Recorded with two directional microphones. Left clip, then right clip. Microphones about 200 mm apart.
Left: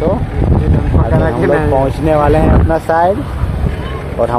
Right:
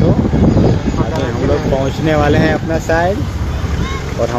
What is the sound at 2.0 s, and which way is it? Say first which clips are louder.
Speech: left 2 dB; centre (ahead or behind).